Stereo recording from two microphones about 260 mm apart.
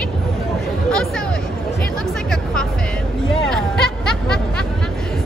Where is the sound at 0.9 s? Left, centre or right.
Centre.